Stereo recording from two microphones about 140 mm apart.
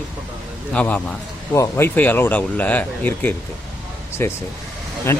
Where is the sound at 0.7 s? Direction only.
10° left (ahead or behind).